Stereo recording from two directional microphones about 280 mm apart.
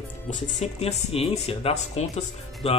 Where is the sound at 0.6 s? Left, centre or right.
Left.